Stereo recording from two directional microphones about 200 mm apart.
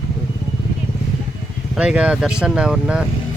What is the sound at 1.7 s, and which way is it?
Speech, 5° right (ahead or behind).